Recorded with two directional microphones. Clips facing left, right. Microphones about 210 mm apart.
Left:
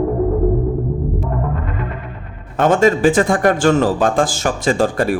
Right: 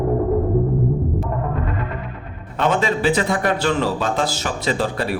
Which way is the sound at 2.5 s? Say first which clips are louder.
Left 6 dB; 45° left (ahead or behind).